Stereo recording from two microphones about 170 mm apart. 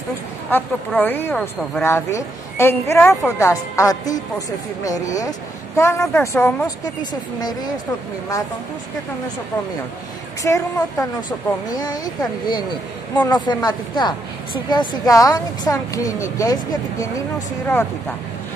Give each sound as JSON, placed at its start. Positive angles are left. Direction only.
{"t": 0.5, "sound": "a woman's voice", "side_deg": 10}
{"t": 10.4, "sound": "a woman's voice", "side_deg": 20}